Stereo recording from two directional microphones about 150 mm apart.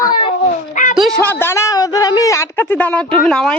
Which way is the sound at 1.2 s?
15° left (ahead or behind).